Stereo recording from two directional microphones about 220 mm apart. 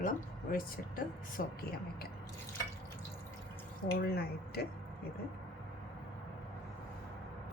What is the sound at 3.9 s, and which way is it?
Speech, 45° left (ahead or behind).